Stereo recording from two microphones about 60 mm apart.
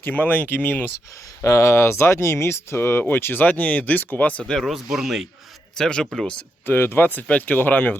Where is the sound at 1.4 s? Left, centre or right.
Left.